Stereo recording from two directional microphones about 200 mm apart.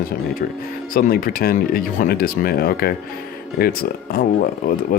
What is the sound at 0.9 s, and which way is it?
Speech, 45° left (ahead or behind).